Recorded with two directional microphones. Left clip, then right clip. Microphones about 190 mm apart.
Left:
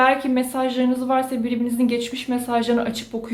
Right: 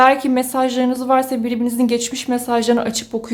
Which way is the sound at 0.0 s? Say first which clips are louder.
Right 5 dB; 35° right (ahead or behind).